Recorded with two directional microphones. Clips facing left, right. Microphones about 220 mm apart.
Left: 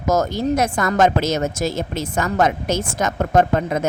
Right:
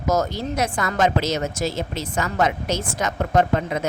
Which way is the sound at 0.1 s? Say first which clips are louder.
Left 4 dB; 50° left (ahead or behind).